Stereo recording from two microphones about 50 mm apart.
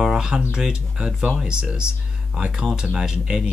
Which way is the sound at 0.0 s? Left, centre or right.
Centre.